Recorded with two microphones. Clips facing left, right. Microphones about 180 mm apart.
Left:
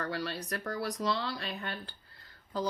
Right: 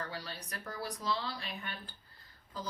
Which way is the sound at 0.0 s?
70° left (ahead or behind).